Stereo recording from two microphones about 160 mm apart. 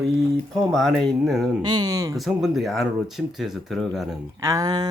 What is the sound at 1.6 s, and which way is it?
Speech, 25° right (ahead or behind).